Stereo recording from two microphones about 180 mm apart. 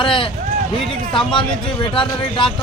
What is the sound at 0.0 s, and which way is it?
Speech, 30° left (ahead or behind).